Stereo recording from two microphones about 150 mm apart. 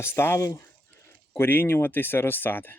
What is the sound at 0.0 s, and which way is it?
Speech, 15° left (ahead or behind).